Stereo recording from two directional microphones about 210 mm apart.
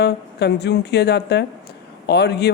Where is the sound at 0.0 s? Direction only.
50° left (ahead or behind).